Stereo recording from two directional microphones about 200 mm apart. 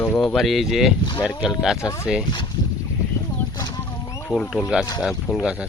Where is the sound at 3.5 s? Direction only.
20° left (ahead or behind).